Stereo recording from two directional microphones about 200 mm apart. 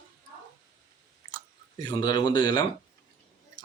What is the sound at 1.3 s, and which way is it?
A man's voice, 20° left (ahead or behind).